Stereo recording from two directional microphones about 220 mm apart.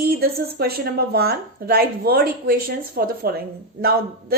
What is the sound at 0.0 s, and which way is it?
Speech, 45° right (ahead or behind).